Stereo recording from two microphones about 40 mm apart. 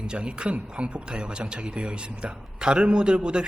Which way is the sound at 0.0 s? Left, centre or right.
Right.